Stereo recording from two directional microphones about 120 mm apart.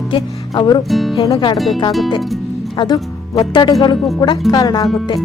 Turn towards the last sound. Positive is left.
turn(degrees=35)  # may be behind; listen again after turning